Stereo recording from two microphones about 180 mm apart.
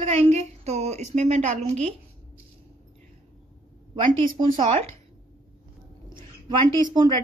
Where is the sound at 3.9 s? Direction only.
30° right (ahead or behind).